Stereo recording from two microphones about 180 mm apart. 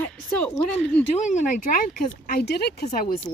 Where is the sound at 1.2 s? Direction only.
40° left (ahead or behind); by 2.8 s 65° left (ahead or behind).